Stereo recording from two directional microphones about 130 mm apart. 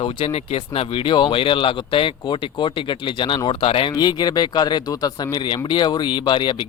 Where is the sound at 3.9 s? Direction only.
35° left (ahead or behind).